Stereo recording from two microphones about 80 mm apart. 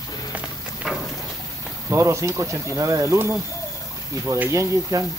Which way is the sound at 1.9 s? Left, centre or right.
Right.